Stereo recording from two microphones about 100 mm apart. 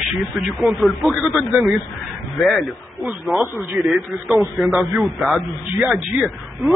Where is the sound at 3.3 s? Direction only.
20° right (ahead or behind).